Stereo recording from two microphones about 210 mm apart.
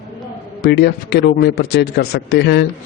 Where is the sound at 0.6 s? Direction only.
50° left (ahead or behind).